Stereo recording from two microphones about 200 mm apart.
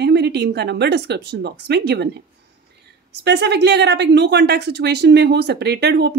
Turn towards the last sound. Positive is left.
turn(degrees=-55)  # may be behind; listen again after turning